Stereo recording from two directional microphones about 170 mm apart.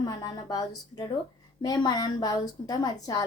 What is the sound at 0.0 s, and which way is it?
A woman's voice, 25° left (ahead or behind).